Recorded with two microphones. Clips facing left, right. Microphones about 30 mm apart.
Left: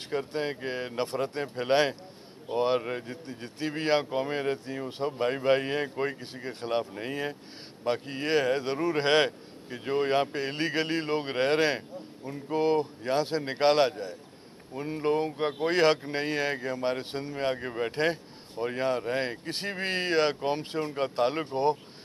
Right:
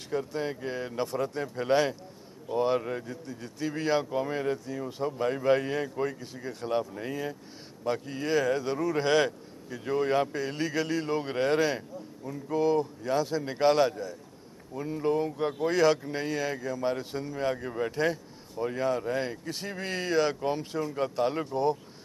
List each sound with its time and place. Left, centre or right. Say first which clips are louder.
0.1 s speech: even; left